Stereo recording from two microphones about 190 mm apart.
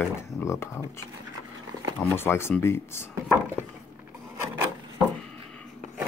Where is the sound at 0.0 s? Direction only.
10° left (ahead or behind).